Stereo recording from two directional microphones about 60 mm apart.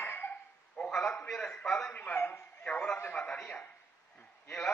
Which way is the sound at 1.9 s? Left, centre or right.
Left.